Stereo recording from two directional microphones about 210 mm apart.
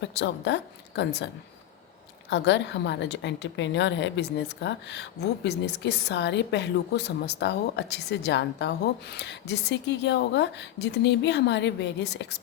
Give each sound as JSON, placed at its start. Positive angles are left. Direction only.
{"t": 0.0, "sound": "a woman's voice", "side_deg": 55}
{"t": 2.3, "sound": "a woman's voice", "side_deg": 55}